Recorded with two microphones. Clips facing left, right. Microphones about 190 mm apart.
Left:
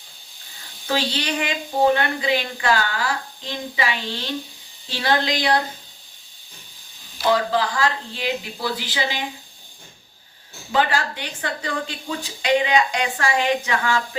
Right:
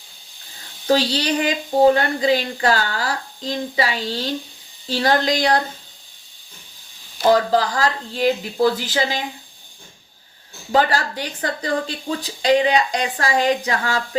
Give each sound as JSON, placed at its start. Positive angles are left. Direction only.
{"t": 0.9, "sound": "speech", "side_deg": -35}
{"t": 7.2, "sound": "speech", "side_deg": -40}
{"t": 10.7, "sound": "speech", "side_deg": -40}